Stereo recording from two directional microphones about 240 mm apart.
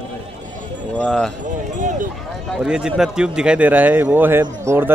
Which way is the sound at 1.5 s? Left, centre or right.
Right.